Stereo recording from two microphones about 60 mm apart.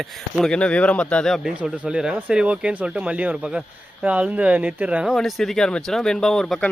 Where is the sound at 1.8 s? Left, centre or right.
Centre.